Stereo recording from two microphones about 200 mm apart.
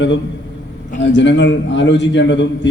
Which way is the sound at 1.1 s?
65° left (ahead or behind).